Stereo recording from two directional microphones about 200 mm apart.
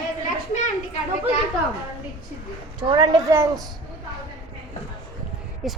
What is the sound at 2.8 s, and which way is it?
Speech, 20° right (ahead or behind).